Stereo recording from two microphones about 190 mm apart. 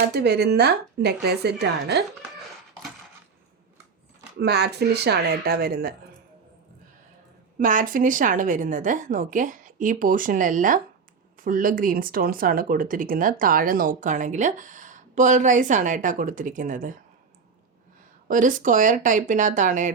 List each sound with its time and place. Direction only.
0.1 s speech: 60° right (ahead or behind)
4.4 s speech: 60° right (ahead or behind)
7.6 s speech: 45° right (ahead or behind)
18.3 s speech: 45° right (ahead or behind)